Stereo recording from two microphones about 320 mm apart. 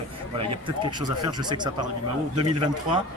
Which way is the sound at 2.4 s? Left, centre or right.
Right.